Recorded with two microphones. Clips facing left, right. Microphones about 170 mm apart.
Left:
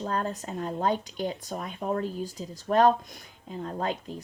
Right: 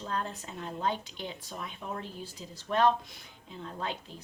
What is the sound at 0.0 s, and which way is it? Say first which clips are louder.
Speech: left 5 dB; 45° left (ahead or behind).